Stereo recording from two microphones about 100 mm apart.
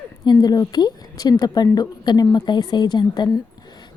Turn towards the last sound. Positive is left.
turn(degrees=45)  # may be behind; listen again after turning